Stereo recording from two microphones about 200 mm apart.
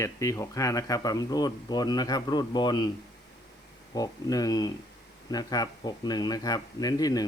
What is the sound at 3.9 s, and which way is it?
Speech, 20° left (ahead or behind).